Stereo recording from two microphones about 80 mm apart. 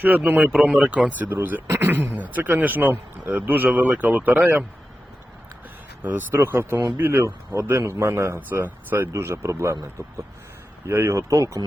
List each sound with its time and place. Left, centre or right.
0.3 s speech: centre
6.0 s speech: right